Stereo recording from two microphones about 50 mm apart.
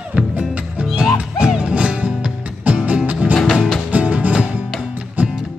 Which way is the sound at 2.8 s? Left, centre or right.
Right.